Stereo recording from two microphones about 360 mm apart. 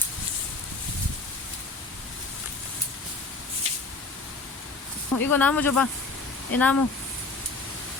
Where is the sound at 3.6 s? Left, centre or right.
Centre.